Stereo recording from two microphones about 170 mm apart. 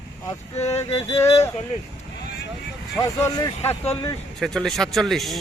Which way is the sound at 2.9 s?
20° left (ahead or behind).